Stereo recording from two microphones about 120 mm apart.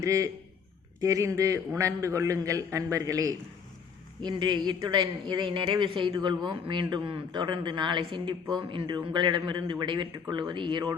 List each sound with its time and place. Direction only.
0.0 s a man's voice: 30° right (ahead or behind)
4.2 s speech: 40° right (ahead or behind)